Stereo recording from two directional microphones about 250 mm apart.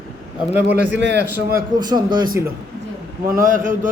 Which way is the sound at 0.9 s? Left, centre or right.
Right.